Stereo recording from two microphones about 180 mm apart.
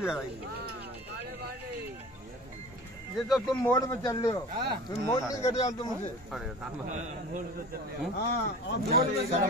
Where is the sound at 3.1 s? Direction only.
Centre (ahead or behind).